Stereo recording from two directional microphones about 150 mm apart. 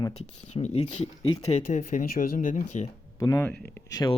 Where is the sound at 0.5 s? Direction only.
50° left (ahead or behind).